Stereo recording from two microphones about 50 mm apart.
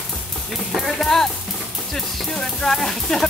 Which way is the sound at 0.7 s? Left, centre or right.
Centre.